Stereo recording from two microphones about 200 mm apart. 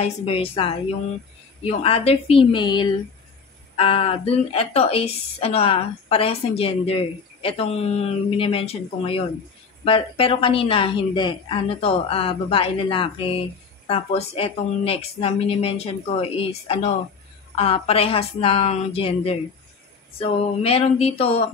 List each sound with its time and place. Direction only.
0.0 s a woman's voice: 30° left (ahead or behind)